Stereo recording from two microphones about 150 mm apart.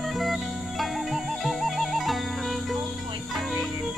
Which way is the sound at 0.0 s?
Centre (ahead or behind).